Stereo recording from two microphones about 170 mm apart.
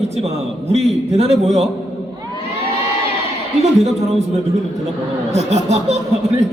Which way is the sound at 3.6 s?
40° right (ahead or behind).